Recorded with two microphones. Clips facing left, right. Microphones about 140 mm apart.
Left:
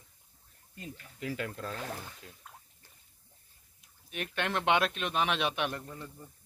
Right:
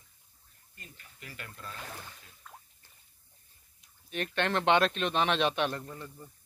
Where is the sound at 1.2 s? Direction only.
90° left.